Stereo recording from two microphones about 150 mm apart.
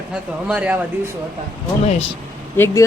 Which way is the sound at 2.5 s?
15° left (ahead or behind).